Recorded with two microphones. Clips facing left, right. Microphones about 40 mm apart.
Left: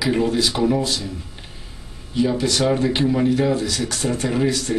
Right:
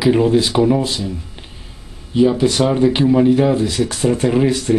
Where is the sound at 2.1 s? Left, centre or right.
Centre.